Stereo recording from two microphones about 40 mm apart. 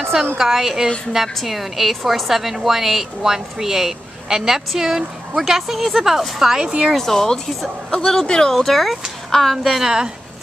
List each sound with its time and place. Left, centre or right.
0.4 s a woman's voice: centre
7.0 s a woman's voice: centre
9.7 s a woman's voice: centre